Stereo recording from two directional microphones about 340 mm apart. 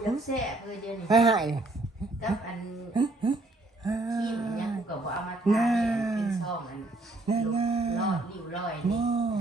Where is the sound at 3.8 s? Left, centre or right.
Centre.